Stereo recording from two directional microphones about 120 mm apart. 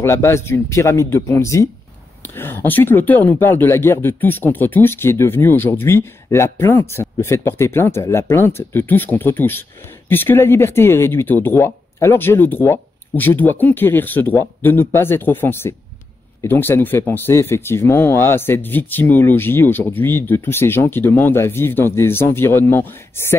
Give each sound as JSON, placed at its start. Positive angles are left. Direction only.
{"t": 0.0, "sound": "speech", "side_deg": 25}